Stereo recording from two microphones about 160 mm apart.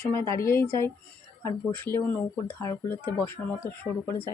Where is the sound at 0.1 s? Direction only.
20° left (ahead or behind).